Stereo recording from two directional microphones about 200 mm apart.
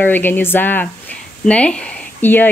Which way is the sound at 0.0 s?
10° left (ahead or behind).